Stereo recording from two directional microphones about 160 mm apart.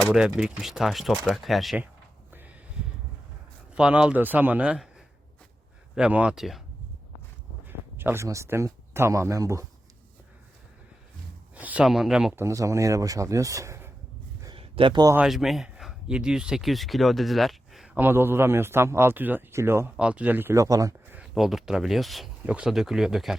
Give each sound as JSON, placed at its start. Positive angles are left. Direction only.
{"t": 0.1, "sound": "speech", "side_deg": -5}
{"t": 3.8, "sound": "speech", "side_deg": -5}
{"t": 6.0, "sound": "speech", "side_deg": -10}
{"t": 7.7, "sound": "speech", "side_deg": -15}
{"t": 11.5, "sound": "speech", "side_deg": -10}
{"t": 12.4, "sound": "speech", "side_deg": -20}
{"t": 14.4, "sound": "a sound", "side_deg": -35}
{"t": 15.1, "sound": "speech", "side_deg": -5}
{"t": 21.2, "sound": "speech", "side_deg": 0}